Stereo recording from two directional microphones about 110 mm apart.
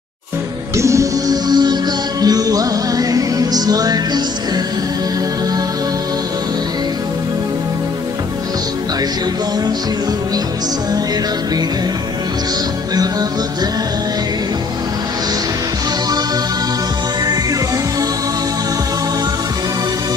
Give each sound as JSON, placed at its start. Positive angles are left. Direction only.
{"t": 0.7, "sound": "music", "side_deg": -30}